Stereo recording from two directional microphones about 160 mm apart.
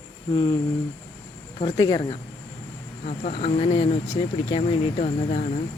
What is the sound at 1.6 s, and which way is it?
Speech, 30° left (ahead or behind).